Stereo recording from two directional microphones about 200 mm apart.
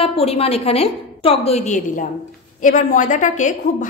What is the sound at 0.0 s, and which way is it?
A woman's voice, 30° left (ahead or behind).